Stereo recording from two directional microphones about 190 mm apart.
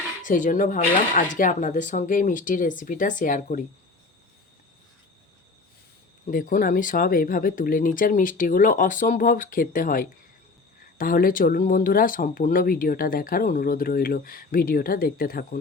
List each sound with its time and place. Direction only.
0.3 s speech: 45° left (ahead or behind)
6.3 s speech: 45° left (ahead or behind)